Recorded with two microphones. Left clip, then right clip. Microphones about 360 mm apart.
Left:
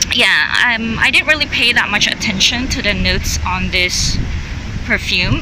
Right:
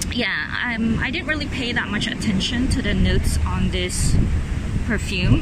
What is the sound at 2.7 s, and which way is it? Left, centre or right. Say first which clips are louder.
Speech: left 8 dB; left.